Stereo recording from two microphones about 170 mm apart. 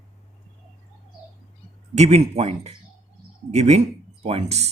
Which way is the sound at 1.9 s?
40° right (ahead or behind).